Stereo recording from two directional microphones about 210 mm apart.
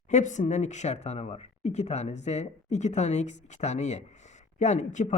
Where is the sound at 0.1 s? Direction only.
35° left (ahead or behind).